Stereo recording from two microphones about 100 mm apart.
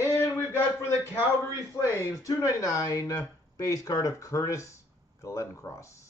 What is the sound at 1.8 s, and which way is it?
Speech, 30° left (ahead or behind).